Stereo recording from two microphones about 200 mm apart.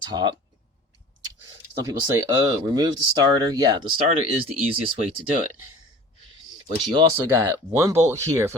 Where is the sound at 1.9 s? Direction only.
20° right (ahead or behind).